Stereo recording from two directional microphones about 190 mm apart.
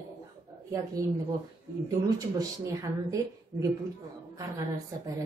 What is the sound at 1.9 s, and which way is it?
A woman's voice, 20° right (ahead or behind).